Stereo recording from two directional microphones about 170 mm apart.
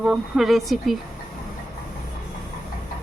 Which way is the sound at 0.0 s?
Centre (ahead or behind).